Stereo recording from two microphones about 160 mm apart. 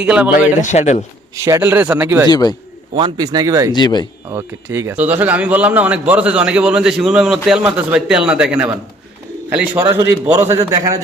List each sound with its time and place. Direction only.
0.0 s a man's voice: 5° right (ahead or behind)
0.3 s a man's voice: 50° left (ahead or behind)
1.5 s a man's voice: 15° right (ahead or behind)
2.3 s speech: 25° left (ahead or behind)
2.9 s speech: 30° right (ahead or behind)
3.7 s speech: 25° left (ahead or behind)
4.3 s a man's voice: 15° right (ahead or behind)
9.9 s a man's voice: 15° right (ahead or behind)